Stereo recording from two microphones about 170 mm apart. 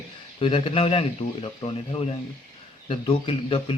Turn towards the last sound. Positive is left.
turn(degrees=35)  # may be behind; listen again after turning